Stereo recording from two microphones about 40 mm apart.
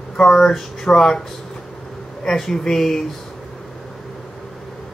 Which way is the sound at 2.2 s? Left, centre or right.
Centre.